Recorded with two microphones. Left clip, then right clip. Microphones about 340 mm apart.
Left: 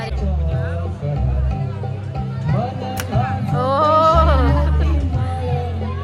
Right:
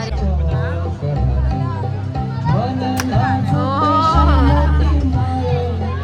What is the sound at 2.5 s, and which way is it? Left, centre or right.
Music, right.